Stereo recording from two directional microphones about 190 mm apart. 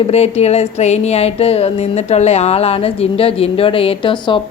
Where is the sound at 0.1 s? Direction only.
35° left (ahead or behind).